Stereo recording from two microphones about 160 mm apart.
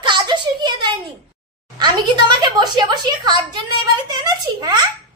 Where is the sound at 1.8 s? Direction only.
25° right (ahead or behind).